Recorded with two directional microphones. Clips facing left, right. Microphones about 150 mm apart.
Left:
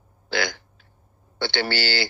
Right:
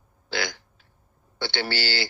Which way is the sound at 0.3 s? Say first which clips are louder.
Left 4 dB; 65° left (ahead or behind).